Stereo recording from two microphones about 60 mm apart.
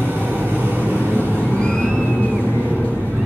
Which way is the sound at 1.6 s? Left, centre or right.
Centre.